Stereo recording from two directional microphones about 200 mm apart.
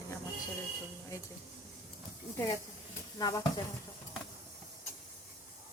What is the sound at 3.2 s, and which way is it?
Speech, 20° left (ahead or behind).